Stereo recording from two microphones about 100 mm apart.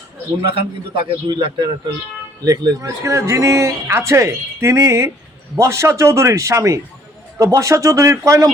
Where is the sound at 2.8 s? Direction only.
30° right (ahead or behind).